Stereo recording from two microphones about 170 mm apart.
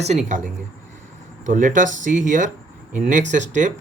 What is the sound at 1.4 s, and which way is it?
Speech, 50° right (ahead or behind).